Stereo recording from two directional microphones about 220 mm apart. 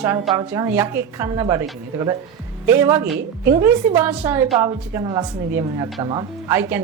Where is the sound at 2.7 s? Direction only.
10° right (ahead or behind).